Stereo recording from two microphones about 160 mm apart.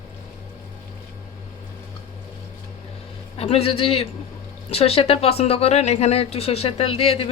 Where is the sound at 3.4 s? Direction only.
40° left (ahead or behind).